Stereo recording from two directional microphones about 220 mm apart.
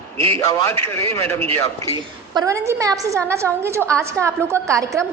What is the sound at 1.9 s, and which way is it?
A woman's voice, 20° right (ahead or behind).